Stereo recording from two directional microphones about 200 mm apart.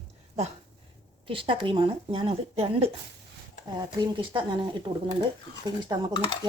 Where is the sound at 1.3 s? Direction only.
25° right (ahead or behind).